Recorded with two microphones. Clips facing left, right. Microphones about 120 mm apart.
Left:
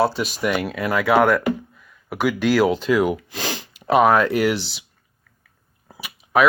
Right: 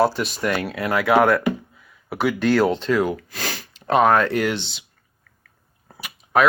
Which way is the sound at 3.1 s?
15° left (ahead or behind).